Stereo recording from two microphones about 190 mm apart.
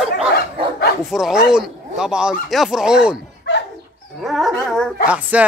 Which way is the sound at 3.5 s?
65° left (ahead or behind).